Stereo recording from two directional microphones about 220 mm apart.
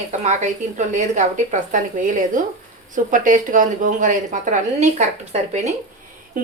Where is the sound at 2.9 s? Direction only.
35° right (ahead or behind).